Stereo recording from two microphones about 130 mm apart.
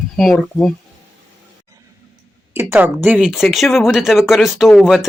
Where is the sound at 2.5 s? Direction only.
15° right (ahead or behind).